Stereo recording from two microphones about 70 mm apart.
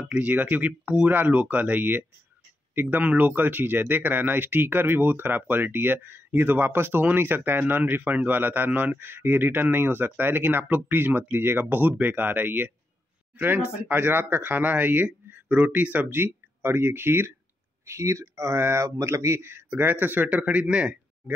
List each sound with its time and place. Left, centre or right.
0.1 s speech: right
13.8 s speech: right
17.8 s speech: right
18.9 s speech: right; by 20.9 s centre